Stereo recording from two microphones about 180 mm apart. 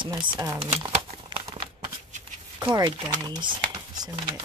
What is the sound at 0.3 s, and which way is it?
Speech, 20° right (ahead or behind).